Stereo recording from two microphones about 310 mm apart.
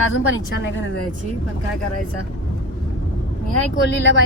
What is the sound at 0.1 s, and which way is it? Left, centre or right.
Speech, left.